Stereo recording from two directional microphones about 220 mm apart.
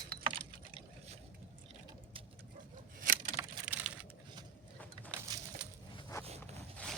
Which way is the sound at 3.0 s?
40° right (ahead or behind).